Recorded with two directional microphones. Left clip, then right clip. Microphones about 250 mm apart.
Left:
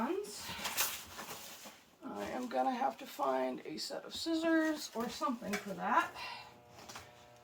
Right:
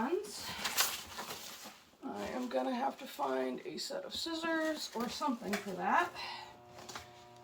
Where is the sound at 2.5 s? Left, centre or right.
Centre.